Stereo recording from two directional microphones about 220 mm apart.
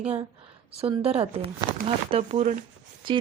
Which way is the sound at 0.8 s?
25° right (ahead or behind).